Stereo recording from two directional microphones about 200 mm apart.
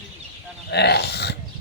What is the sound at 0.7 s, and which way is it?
Speech, 55° left (ahead or behind).